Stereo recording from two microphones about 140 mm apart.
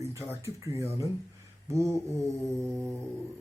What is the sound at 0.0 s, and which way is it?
Speech, 20° right (ahead or behind).